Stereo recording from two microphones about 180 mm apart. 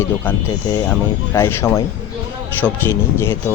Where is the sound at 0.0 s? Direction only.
15° left (ahead or behind).